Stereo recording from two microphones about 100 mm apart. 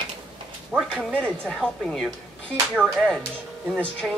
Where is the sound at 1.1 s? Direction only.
10° left (ahead or behind).